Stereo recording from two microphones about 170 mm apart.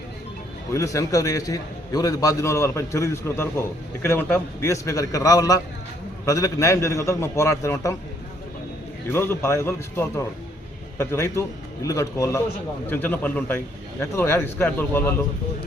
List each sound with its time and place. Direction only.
0.7 s a man's voice: 20° left (ahead or behind)
9.0 s a man's voice: 15° left (ahead or behind)